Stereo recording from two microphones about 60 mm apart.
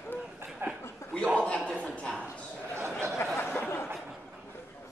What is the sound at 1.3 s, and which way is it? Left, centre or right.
Chuckle, centre.